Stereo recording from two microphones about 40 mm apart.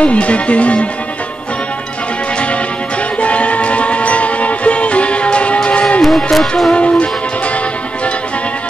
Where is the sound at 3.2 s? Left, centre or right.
Left.